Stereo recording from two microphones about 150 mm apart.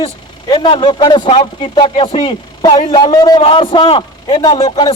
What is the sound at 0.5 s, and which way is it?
A man's voice, 35° left (ahead or behind).